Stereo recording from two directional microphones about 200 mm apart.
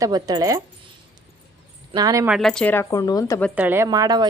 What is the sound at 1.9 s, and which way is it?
Speech, 20° right (ahead or behind).